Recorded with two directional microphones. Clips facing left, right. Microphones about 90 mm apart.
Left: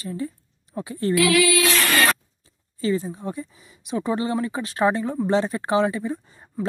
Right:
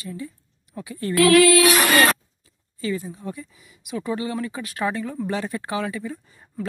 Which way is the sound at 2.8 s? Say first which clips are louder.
Left 4 dB; 30° left (ahead or behind).